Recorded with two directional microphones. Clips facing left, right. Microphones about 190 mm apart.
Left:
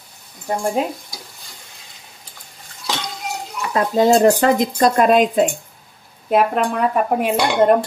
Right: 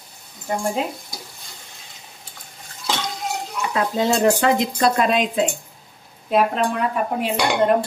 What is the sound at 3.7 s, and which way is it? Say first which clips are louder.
Speech: left 6 dB; 40° left (ahead or behind).